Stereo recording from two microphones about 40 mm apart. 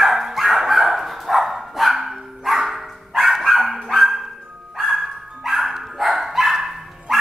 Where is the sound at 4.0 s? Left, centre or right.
Centre.